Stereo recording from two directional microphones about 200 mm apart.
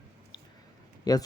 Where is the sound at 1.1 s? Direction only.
20° left (ahead or behind).